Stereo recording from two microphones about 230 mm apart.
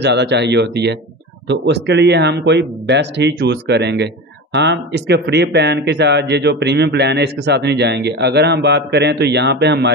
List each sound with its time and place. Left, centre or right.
0.0 s speech: right